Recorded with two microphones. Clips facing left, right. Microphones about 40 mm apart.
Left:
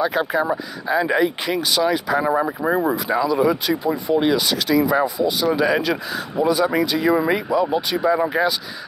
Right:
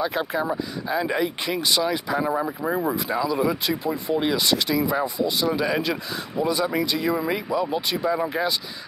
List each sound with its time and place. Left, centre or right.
0.0 s speech: centre
2.3 s speech: left
3.3 s speech: centre